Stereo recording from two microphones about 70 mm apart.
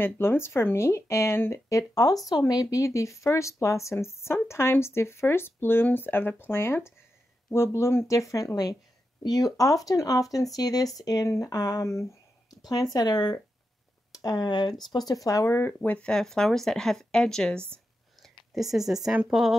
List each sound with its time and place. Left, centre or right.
0.0 s speech: left
8.1 s speech: left
9.2 s speech: left
12.4 s a sound: left
12.9 s speech: left
14.9 s speech: left
15.5 s speech: left
16.1 s speech: centre
18.2 s a sound: centre